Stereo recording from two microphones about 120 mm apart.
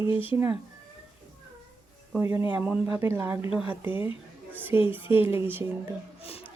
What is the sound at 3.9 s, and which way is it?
Speech, 45° left (ahead or behind).